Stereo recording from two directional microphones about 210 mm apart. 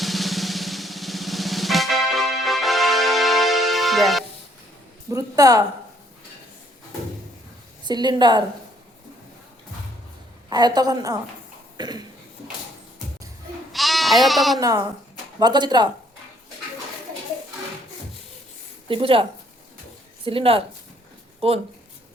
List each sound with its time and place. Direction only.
0.0 s drum: centre (ahead or behind)
5.1 s speech: 15° right (ahead or behind)
7.9 s a woman's voice: 20° right (ahead or behind)
10.5 s a woman's voice: 20° right (ahead or behind)
13.7 s sheep: centre (ahead or behind)
14.3 s speech: centre (ahead or behind)
14.6 s a woman's voice: 15° right (ahead or behind)
18.9 s a woman's voice: 25° right (ahead or behind)